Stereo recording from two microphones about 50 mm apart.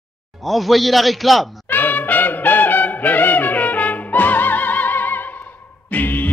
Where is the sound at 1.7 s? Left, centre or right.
Left.